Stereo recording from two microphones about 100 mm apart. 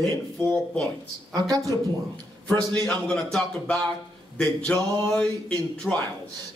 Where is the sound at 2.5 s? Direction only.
40° right (ahead or behind).